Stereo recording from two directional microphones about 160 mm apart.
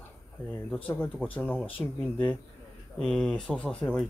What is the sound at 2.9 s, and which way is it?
Speech, 5° left (ahead or behind).